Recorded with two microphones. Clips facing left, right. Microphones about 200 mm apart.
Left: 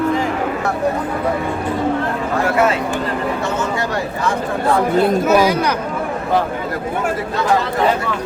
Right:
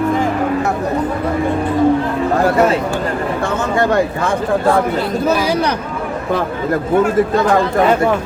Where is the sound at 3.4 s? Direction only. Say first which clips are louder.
Right 4 dB; 55° right (ahead or behind).